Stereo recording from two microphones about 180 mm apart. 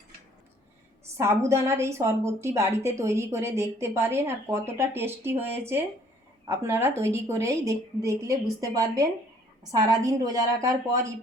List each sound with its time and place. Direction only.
1.1 s a woman's voice: 15° right (ahead or behind)